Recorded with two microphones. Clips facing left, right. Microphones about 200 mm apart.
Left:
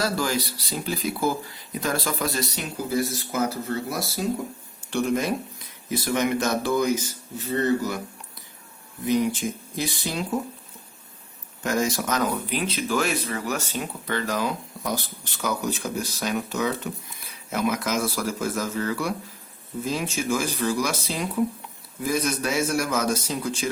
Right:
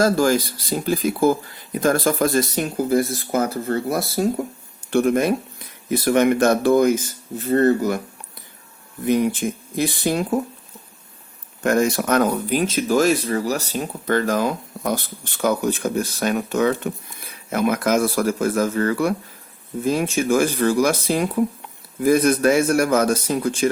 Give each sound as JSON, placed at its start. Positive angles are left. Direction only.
{"t": 0.0, "sound": "speech", "side_deg": -50}
{"t": 9.0, "sound": "speech", "side_deg": -55}
{"t": 11.6, "sound": "speech", "side_deg": -60}